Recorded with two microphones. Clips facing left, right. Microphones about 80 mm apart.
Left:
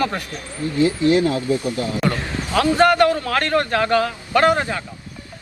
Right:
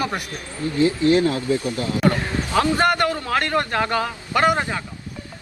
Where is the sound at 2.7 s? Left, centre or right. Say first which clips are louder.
Left 5 dB; right.